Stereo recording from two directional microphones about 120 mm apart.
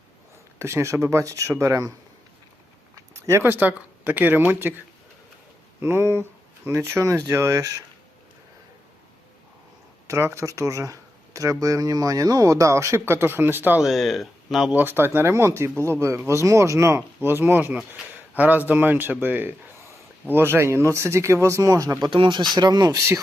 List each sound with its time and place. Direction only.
0.6 s speech: 20° right (ahead or behind)
2.9 s speech: 25° right (ahead or behind)
5.8 s speech: 20° right (ahead or behind)
10.1 s speech: 25° right (ahead or behind)
13.8 s speech: centre (ahead or behind)
14.7 s speech: 15° right (ahead or behind)
15.7 s speech: 15° left (ahead or behind)
16.0 s speech: 20° right (ahead or behind)
22.1 s speech: 40° right (ahead or behind); by 23.2 s 25° right (ahead or behind)